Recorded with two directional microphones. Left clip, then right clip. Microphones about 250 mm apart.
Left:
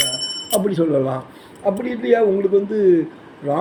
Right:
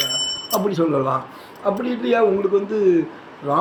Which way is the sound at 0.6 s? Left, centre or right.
Centre.